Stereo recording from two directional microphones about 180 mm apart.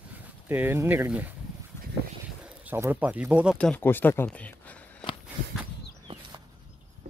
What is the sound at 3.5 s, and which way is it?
Speech, 10° left (ahead or behind).